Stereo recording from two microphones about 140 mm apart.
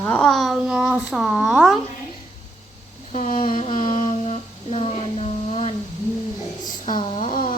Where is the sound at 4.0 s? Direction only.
50° left (ahead or behind).